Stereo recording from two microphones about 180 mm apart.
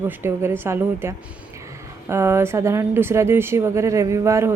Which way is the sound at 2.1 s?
15° right (ahead or behind).